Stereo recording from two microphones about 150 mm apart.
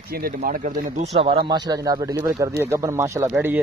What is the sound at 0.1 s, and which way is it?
Speech, 75° right (ahead or behind).